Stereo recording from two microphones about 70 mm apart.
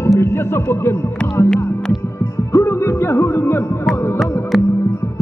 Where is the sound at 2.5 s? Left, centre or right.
Left.